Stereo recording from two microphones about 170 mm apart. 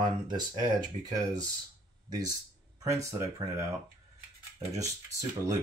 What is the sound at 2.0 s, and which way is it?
Speech, 25° right (ahead or behind).